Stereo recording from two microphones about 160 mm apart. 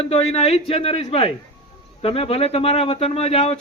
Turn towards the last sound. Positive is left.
turn(degrees=40)  # may be behind; listen again after turning